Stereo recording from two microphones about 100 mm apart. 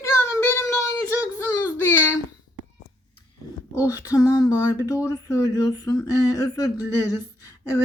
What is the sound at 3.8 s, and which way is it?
Speech, 35° left (ahead or behind).